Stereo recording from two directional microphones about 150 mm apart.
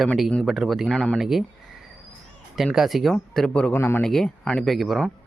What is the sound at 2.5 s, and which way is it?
Speech, centre (ahead or behind).